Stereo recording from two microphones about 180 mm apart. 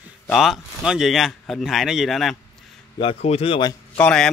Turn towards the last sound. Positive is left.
turn(degrees=5)  # may be behind; listen again after turning